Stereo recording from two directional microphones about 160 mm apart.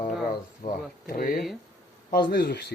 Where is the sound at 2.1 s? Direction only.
80° left.